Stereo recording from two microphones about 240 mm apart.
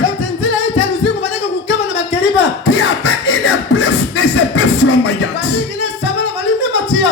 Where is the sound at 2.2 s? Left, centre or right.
Left.